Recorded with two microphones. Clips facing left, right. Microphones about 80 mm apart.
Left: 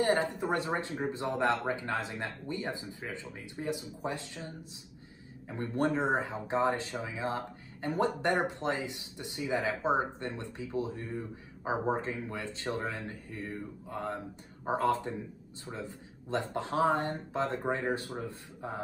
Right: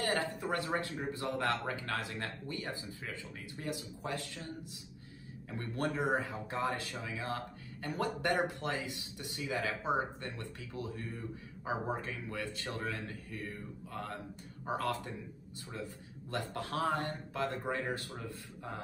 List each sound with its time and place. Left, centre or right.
0.0 s speech: left
5.5 s speech: left
16.3 s speech: left